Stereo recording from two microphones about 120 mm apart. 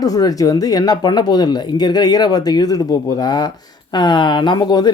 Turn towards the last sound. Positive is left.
turn(degrees=35)  # may be behind; listen again after turning